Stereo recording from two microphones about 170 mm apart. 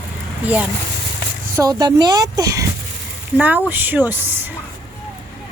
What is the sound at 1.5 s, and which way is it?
Speech, 20° right (ahead or behind).